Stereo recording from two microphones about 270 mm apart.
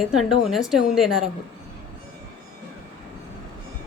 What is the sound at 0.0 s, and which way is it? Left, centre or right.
A woman's voice, centre.